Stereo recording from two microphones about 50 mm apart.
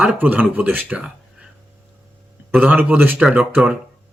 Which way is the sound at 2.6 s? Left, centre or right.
Right.